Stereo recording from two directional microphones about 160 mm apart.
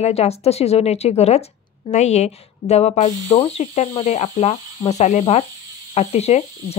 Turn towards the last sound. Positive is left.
turn(degrees=40)  # may be behind; listen again after turning